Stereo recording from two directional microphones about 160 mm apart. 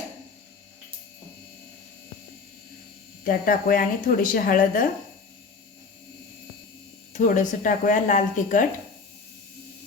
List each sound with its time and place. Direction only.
3.2 s speech: 60° left (ahead or behind)
7.1 s speech: 55° left (ahead or behind)